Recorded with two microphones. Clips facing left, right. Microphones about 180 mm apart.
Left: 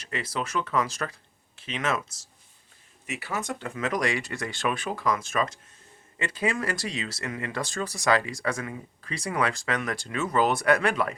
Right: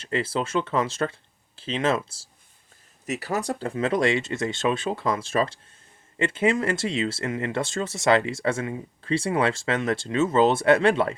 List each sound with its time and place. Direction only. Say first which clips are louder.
0.0 s speech: right 6 dB; 30° right (ahead or behind)